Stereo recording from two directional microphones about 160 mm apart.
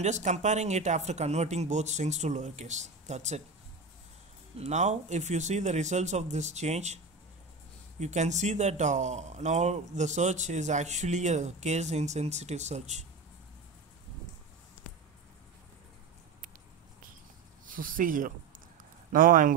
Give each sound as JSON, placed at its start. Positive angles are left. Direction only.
{"t": 0.0, "sound": "speech", "side_deg": -45}
{"t": 4.6, "sound": "speech", "side_deg": -45}
{"t": 8.0, "sound": "speech", "side_deg": -45}
{"t": 17.6, "sound": "speech", "side_deg": -60}